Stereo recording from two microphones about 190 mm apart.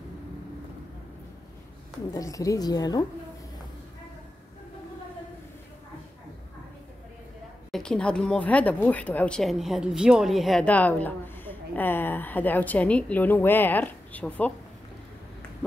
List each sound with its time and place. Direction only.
2.1 s a woman's voice: 15° left (ahead or behind)
7.7 s speech: 5° left (ahead or behind)